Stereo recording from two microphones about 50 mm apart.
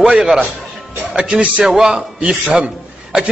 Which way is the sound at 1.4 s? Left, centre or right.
Right.